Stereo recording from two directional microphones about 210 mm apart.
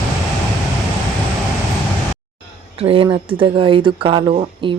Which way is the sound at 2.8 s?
25° right (ahead or behind).